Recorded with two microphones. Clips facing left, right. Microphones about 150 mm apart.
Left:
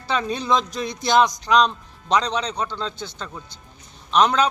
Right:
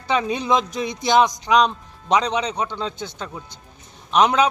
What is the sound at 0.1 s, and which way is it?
A man's voice, 15° right (ahead or behind).